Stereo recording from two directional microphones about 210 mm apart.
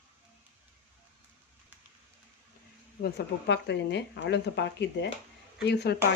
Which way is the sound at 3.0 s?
55° left (ahead or behind).